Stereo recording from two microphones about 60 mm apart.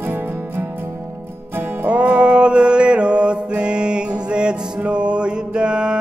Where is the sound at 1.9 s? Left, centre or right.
Right.